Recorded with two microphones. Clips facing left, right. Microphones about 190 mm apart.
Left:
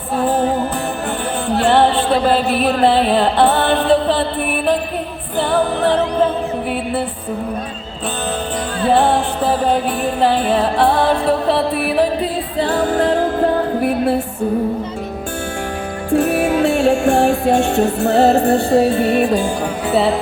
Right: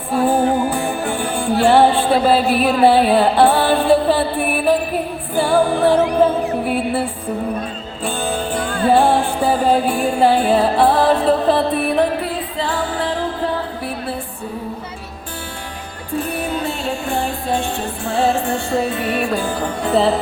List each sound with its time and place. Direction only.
0.2 s music: 10° right (ahead or behind)
1.5 s music: 10° right (ahead or behind)
8.8 s music: 10° right (ahead or behind)
12.5 s music: 40° left (ahead or behind)
16.1 s music: 70° left (ahead or behind)
18.4 s music: 35° left (ahead or behind)
19.9 s music: 5° left (ahead or behind)